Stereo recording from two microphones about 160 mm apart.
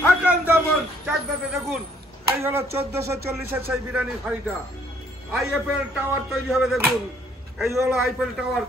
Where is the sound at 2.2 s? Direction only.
15° right (ahead or behind).